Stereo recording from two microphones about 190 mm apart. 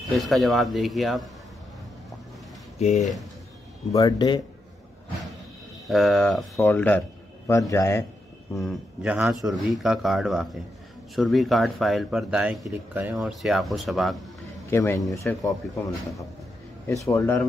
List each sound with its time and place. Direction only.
0.2 s speech: centre (ahead or behind)
3.0 s speech: centre (ahead or behind)
3.9 s speech: 20° left (ahead or behind)
5.9 s speech: centre (ahead or behind)
8.5 s speech: 5° right (ahead or behind)
14.7 s speech: 15° left (ahead or behind)